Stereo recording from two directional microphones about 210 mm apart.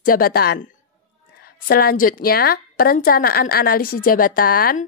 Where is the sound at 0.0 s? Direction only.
45° left (ahead or behind).